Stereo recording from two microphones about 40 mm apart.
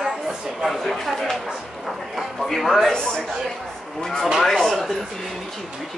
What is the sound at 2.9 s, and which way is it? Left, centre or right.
Speech, centre.